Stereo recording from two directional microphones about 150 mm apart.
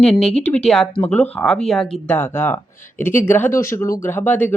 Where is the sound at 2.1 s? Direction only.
15° left (ahead or behind).